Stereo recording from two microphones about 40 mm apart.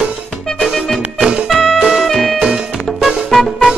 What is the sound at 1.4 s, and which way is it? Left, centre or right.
Music, centre.